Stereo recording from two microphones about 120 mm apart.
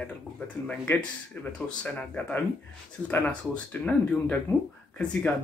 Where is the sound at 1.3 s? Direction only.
15° left (ahead or behind).